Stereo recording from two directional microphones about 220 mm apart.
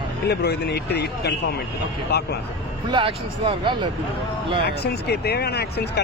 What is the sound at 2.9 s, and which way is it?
Speech, 25° right (ahead or behind).